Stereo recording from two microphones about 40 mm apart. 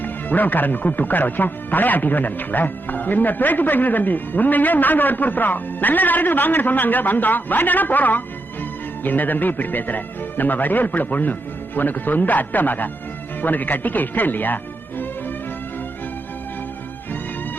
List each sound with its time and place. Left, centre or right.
0.0 s speech: left